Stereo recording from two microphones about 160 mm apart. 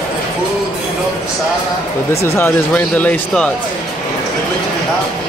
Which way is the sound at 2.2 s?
15° left (ahead or behind).